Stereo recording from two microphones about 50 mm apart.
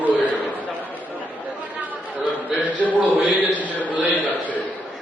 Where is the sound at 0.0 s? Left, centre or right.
Right.